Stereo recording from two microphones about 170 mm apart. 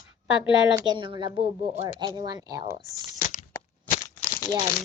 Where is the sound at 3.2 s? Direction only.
45° left (ahead or behind).